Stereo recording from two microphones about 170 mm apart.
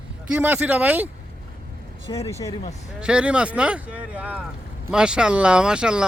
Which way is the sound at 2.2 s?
20° left (ahead or behind).